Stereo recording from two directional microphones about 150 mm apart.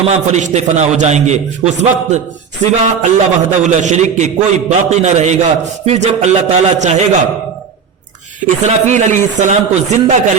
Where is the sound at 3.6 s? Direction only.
50° right (ahead or behind).